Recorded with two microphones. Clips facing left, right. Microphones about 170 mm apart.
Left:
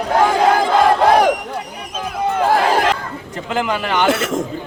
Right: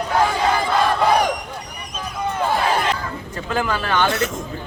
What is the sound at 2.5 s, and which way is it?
Chatter, 90° left.